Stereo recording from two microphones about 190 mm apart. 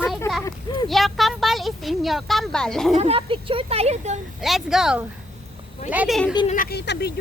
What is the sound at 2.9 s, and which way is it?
Speech, 30° right (ahead or behind).